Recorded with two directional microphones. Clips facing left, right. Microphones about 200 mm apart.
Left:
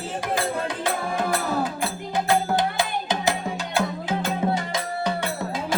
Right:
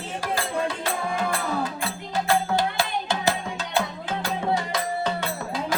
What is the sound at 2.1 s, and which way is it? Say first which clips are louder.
Music: left 1 dB; 20° left (ahead or behind).